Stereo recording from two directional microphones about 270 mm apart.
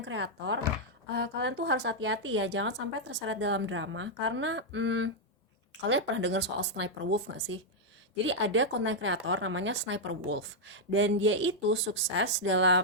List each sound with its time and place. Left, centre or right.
0.0 s a woman's voice: right